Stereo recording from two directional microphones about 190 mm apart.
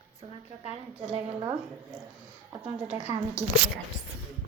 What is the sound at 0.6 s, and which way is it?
Speech, 35° right (ahead or behind).